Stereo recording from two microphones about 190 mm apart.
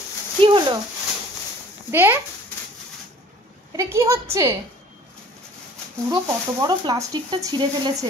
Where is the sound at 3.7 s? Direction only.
15° right (ahead or behind).